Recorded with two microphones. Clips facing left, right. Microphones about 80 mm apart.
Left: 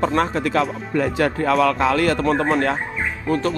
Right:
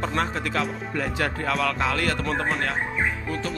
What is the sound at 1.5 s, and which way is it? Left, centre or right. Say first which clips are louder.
Speech: left 8 dB; left.